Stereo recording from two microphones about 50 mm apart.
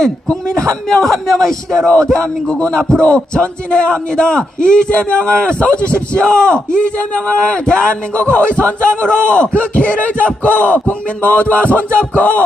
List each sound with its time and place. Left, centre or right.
0.0 s a man's voice: centre
2.1 s a man's voice: centre